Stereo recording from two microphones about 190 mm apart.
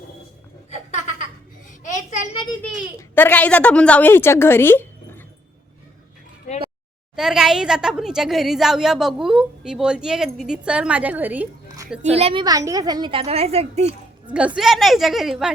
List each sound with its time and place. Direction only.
0.7 s a sound: 40° left (ahead or behind)
2.6 s a woman's voice: 5° left (ahead or behind)
7.2 s a woman's voice: centre (ahead or behind)
12.1 s a woman's voice: 30° right (ahead or behind)
14.3 s a woman's voice: 5° right (ahead or behind)